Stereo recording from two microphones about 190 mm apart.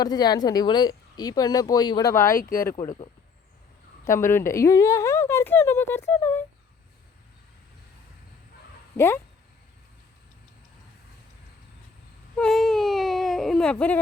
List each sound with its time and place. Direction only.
0.0 s speech: 20° left (ahead or behind)
2.8 s speech: 40° left (ahead or behind)
4.2 s speech: 15° left (ahead or behind)
9.0 s speech: 15° left (ahead or behind)
12.4 s speech: centre (ahead or behind)